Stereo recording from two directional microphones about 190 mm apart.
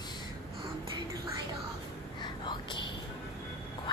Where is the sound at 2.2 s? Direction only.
25° left (ahead or behind).